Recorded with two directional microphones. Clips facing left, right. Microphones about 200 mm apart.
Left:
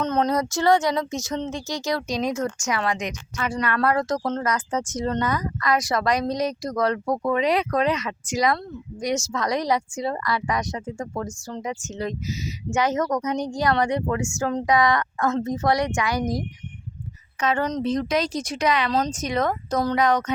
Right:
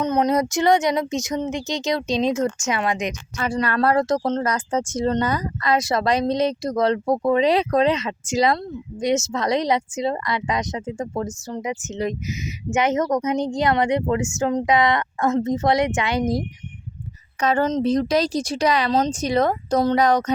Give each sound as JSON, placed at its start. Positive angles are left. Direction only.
{"t": 0.0, "sound": "speech", "side_deg": -10}
{"t": 3.3, "sound": "speech", "side_deg": -35}
{"t": 17.4, "sound": "speech", "side_deg": -35}
{"t": 18.9, "sound": "speech", "side_deg": -25}